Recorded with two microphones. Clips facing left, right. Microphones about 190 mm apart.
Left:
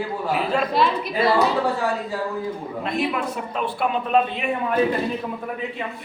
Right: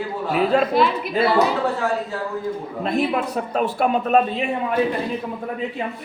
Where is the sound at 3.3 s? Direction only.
40° right (ahead or behind).